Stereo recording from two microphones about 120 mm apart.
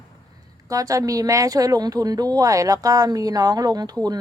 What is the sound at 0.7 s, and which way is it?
Speech, 30° right (ahead or behind).